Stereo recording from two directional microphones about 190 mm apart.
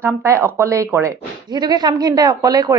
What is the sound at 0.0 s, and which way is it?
A woman's voice, 15° right (ahead or behind).